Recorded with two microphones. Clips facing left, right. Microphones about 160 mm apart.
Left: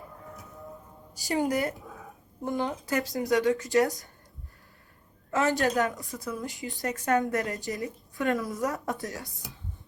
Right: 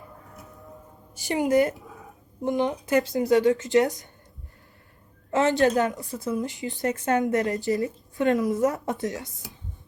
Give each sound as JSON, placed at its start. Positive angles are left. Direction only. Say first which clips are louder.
{"t": 1.1, "sound": "a woman's voice", "louder": "right 5 dB", "side_deg": -20}
{"t": 5.3, "sound": "a woman's voice", "louder": "right 5 dB", "side_deg": -25}